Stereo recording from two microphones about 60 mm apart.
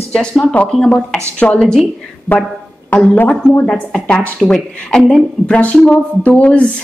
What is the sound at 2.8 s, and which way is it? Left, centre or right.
Speech, left.